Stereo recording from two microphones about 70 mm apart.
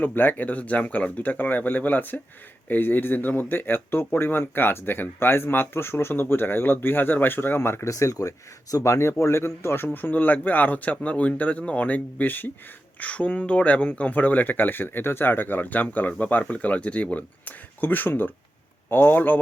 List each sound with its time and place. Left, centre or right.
0.0 s speech: left
7.9 s speech: left